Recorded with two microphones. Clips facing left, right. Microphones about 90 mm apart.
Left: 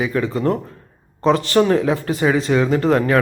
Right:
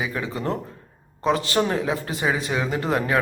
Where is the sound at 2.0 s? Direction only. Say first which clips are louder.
Left 7 dB; 20° right (ahead or behind).